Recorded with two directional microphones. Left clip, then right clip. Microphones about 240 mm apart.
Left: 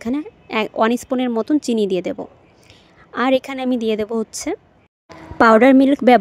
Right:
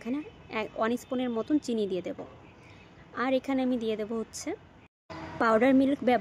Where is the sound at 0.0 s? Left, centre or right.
Left.